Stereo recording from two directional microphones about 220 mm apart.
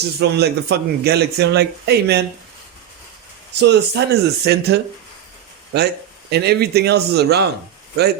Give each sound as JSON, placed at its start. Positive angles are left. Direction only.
{"t": 0.2, "sound": "speech", "side_deg": -50}
{"t": 3.6, "sound": "speech", "side_deg": -50}